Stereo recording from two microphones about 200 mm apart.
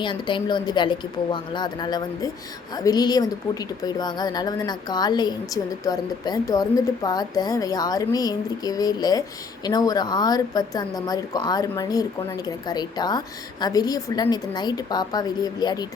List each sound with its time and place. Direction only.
0.0 s a woman's voice: 25° left (ahead or behind)